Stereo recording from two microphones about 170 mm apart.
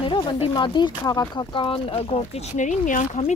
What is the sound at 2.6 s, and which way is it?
Speech, 50° left (ahead or behind).